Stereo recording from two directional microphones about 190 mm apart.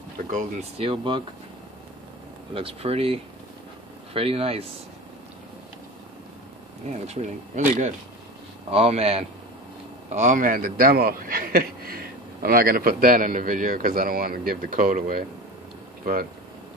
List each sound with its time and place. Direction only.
0.3 s speech: 40° right (ahead or behind)
0.8 s speech: 25° right (ahead or behind)
2.5 s speech: 30° right (ahead or behind)
6.9 s a man's voice: 35° right (ahead or behind)